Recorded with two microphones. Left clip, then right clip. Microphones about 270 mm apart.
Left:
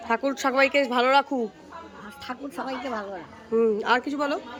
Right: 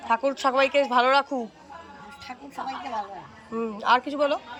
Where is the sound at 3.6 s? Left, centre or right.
Centre.